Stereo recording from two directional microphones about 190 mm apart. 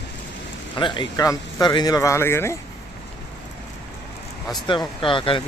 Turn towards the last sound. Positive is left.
turn(degrees=25)  # may be behind; listen again after turning